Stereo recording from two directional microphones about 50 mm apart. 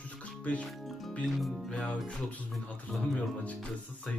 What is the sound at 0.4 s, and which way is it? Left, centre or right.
Music, left.